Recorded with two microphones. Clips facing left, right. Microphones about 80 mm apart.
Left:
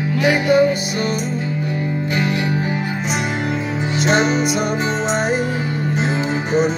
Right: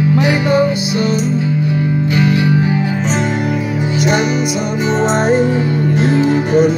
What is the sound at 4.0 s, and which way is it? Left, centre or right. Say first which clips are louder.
Music: right 1 dB; left.